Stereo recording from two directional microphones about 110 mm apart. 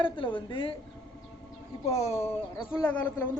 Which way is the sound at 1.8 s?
70° left (ahead or behind).